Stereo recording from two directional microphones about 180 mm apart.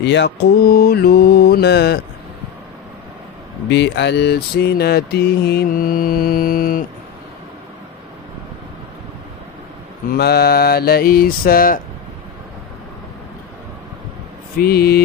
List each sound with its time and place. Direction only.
0.0 s mantra: 75° left (ahead or behind)
3.6 s mantra: 75° left (ahead or behind); by 6.8 s 50° left (ahead or behind)
10.1 s mantra: 60° left (ahead or behind)
14.6 s mantra: 60° left (ahead or behind)